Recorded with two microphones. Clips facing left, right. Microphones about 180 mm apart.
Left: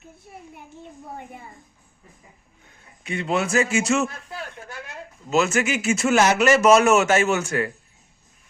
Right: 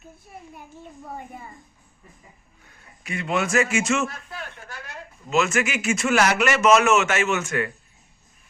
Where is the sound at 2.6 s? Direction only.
25° left (ahead or behind).